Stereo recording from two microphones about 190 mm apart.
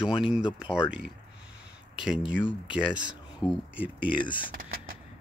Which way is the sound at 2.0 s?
5° right (ahead or behind).